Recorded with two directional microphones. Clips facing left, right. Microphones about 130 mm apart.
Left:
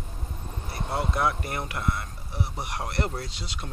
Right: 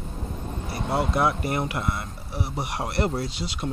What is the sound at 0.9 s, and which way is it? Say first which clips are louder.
Speech: right 3 dB; 10° right (ahead or behind).